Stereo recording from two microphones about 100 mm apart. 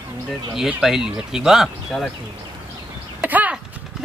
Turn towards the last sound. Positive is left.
turn(degrees=-15)  # may be behind; listen again after turning